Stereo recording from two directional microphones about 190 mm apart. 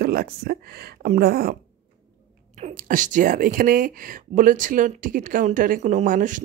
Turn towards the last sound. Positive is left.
turn(degrees=-45)  # may be behind; listen again after turning